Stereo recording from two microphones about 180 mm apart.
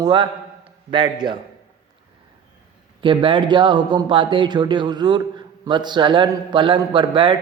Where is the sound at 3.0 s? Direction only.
30° right (ahead or behind).